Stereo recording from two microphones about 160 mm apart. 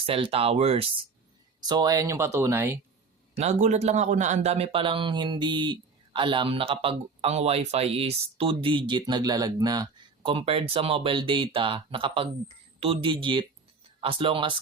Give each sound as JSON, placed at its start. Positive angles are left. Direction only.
{"t": 0.0, "sound": "a man's voice", "side_deg": -35}
{"t": 1.6, "sound": "speech", "side_deg": -25}
{"t": 3.3, "sound": "a man's voice", "side_deg": -45}
{"t": 10.2, "sound": "a man's voice", "side_deg": -35}